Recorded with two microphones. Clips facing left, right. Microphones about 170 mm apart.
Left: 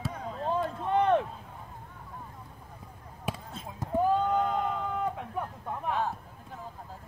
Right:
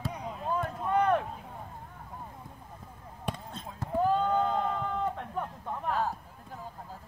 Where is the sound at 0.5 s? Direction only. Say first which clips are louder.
Left 1 dB; 25° left (ahead or behind).